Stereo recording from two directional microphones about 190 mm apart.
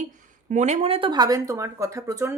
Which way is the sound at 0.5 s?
35° right (ahead or behind).